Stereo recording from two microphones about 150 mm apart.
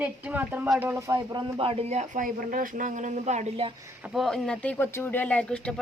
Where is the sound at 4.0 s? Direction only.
Centre (ahead or behind).